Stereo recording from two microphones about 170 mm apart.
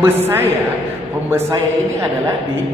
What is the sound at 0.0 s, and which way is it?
A man's voice, 15° right (ahead or behind).